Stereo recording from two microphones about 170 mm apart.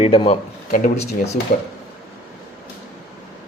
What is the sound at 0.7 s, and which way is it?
Speech, 55° left (ahead or behind).